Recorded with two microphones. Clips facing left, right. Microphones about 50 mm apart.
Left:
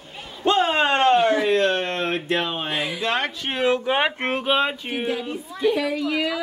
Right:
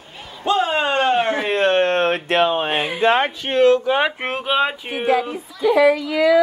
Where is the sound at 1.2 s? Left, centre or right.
Right.